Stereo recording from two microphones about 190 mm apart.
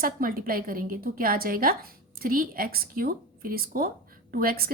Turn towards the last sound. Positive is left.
turn(degrees=-50)  # may be behind; listen again after turning